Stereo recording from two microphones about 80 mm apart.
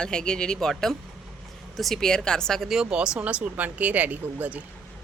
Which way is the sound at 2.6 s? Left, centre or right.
Centre.